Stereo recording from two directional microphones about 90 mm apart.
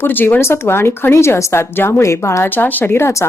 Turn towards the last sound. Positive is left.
turn(degrees=25)  # may be behind; listen again after turning